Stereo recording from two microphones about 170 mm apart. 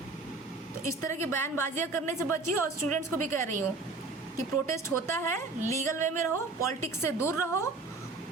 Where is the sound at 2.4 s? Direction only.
45° right (ahead or behind).